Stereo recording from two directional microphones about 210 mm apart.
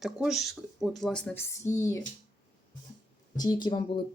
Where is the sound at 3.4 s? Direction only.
20° left (ahead or behind).